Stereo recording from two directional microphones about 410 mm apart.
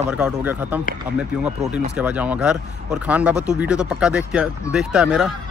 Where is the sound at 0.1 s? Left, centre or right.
Centre.